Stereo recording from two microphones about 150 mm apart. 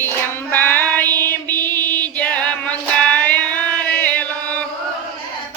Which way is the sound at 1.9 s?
10° left (ahead or behind).